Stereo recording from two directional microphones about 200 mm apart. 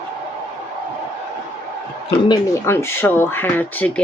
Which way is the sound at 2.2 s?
15° left (ahead or behind).